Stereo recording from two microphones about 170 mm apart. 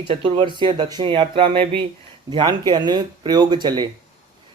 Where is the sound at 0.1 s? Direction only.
30° right (ahead or behind).